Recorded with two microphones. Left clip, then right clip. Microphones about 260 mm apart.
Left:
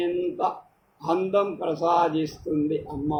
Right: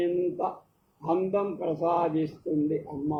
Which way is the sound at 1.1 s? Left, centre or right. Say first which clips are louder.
Left 4 dB; left.